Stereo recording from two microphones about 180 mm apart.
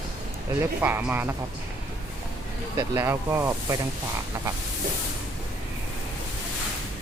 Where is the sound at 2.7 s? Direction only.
15° right (ahead or behind).